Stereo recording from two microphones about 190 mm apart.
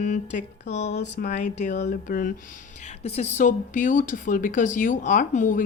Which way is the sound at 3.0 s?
35° left (ahead or behind).